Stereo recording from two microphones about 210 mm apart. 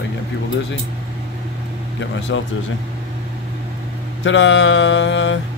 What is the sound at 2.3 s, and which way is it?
Mantra, 65° left (ahead or behind).